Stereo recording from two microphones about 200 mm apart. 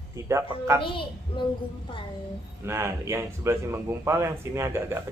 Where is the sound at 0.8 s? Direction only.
25° left (ahead or behind).